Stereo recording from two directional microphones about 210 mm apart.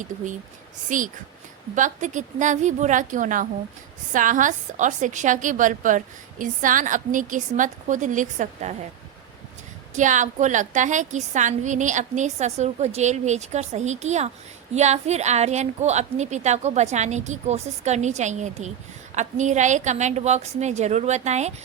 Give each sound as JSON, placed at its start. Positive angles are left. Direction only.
{"t": 0.9, "sound": "a woman's voice", "side_deg": -40}
{"t": 9.9, "sound": "a woman's voice", "side_deg": -35}